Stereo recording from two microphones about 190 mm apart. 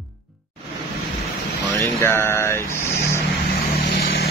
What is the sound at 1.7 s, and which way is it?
Speech, 15° left (ahead or behind).